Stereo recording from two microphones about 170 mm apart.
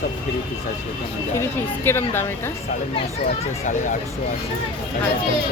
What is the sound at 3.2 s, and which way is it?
Speech, 45° left (ahead or behind).